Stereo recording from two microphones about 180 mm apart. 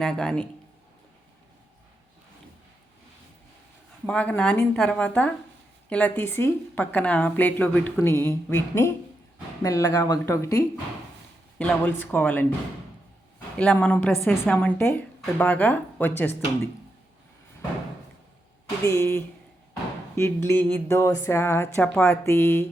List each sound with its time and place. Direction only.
0.0 s speech: 5° left (ahead or behind)
4.0 s a woman's voice: 5° left (ahead or behind)
11.5 s a woman's voice: 5° left (ahead or behind)
13.6 s a woman's voice: 10° left (ahead or behind)
18.9 s a woman's voice: 15° left (ahead or behind)